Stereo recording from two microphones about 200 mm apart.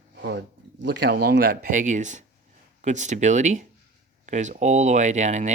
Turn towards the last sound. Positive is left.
turn(degrees=-35)  # may be behind; listen again after turning